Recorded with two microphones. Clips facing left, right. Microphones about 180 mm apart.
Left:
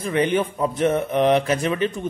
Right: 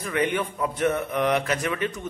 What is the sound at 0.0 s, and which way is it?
Speech, 30° left (ahead or behind).